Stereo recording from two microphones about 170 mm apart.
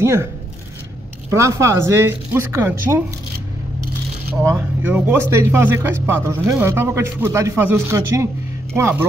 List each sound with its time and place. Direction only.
0.0 s speech: 15° right (ahead or behind)
1.3 s speech: 15° right (ahead or behind)
4.4 s speech: 15° right (ahead or behind)